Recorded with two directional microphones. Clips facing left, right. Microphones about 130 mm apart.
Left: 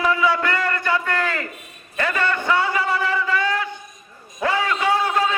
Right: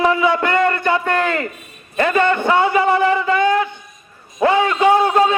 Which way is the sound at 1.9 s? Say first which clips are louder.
Right 7 dB; 25° right (ahead or behind).